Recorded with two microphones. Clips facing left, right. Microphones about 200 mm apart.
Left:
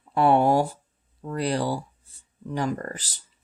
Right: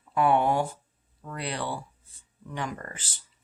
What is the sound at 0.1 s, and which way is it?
Speech, 35° left (ahead or behind).